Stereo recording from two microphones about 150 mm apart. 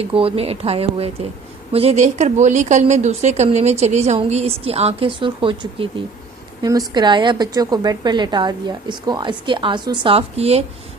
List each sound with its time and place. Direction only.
0.0 s a woman's voice: 40° right (ahead or behind)